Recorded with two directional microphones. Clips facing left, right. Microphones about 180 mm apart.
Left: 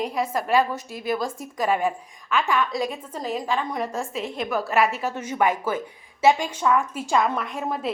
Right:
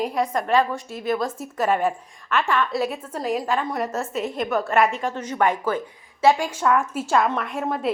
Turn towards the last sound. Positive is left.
turn(degrees=0)  # may be behind; listen again after turning